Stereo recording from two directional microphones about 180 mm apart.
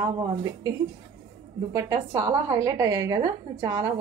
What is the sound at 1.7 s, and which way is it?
A woman's voice, 20° right (ahead or behind).